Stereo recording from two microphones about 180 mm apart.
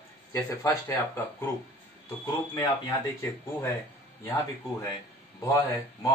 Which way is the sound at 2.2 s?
20° left (ahead or behind).